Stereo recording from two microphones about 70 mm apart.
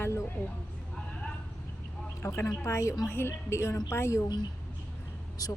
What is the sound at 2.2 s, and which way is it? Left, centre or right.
Speech, left.